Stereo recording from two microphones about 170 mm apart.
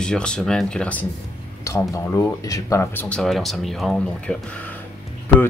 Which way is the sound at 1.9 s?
20° left (ahead or behind).